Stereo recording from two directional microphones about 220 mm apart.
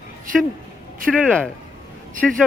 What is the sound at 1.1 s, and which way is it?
Speech, 5° left (ahead or behind).